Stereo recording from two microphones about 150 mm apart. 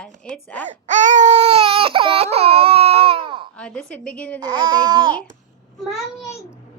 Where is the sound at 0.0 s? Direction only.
10° left (ahead or behind).